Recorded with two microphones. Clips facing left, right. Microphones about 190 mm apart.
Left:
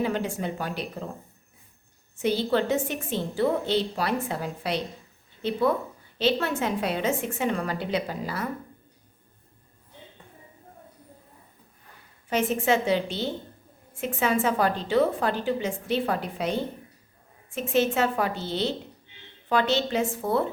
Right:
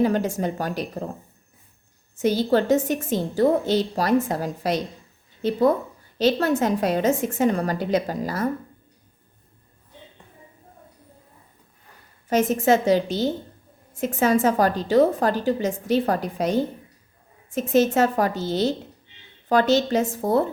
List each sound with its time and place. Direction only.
0.0 s speech: 40° right (ahead or behind)
2.1 s a woman's voice: 40° right (ahead or behind)
12.3 s a woman's voice: 40° right (ahead or behind)